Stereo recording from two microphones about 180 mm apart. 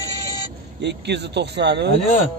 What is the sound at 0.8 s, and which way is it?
Speech, 70° right (ahead or behind).